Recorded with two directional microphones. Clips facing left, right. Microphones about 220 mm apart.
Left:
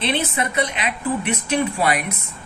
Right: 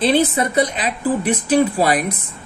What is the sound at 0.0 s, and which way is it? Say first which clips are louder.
A man's voice: right 7 dB; 35° right (ahead or behind).